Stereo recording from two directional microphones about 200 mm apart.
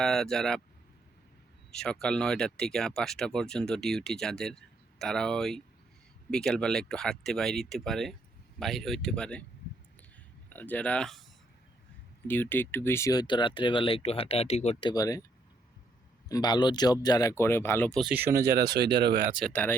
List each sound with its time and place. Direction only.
0.0 s speech: centre (ahead or behind)
1.7 s speech: 5° left (ahead or behind)
10.5 s speech: 10° left (ahead or behind)
12.3 s speech: 10° left (ahead or behind)
16.3 s speech: 20° left (ahead or behind); by 18.1 s 5° left (ahead or behind)
18.1 s speech: 10° right (ahead or behind)
18.5 s speech: 55° right (ahead or behind)
19.4 s speech: 5° left (ahead or behind)